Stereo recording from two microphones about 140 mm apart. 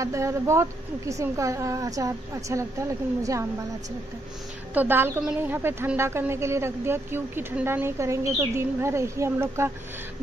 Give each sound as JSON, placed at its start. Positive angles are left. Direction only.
{"t": 0.0, "sound": "a woman's voice", "side_deg": -20}
{"t": 4.7, "sound": "a woman's voice", "side_deg": -15}